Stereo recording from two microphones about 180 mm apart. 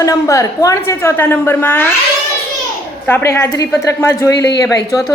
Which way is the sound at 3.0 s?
15° left (ahead or behind).